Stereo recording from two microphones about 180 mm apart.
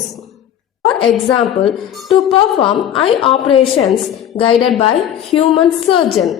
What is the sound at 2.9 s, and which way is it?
Speech, 30° left (ahead or behind).